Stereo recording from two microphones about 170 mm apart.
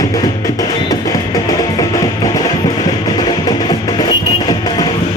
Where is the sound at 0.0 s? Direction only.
20° left (ahead or behind).